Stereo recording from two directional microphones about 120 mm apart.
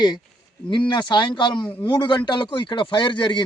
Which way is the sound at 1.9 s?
40° left (ahead or behind).